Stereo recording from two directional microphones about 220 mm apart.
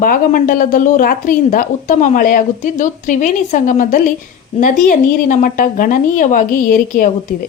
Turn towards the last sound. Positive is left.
turn(degrees=40)  # may be behind; listen again after turning